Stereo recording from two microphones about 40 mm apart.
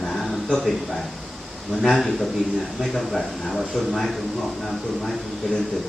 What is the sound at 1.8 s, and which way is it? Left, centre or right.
Speech, centre.